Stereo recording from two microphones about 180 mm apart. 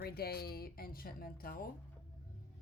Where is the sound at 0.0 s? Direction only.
60° left (ahead or behind).